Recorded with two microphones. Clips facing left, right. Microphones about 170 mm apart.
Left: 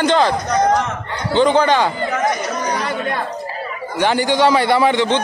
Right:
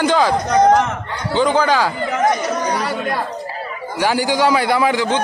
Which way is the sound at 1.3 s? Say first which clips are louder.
Left 2 dB; 5° right (ahead or behind).